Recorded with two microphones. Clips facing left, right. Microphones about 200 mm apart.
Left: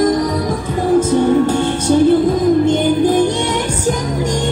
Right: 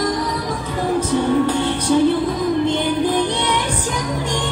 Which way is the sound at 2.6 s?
45° left (ahead or behind).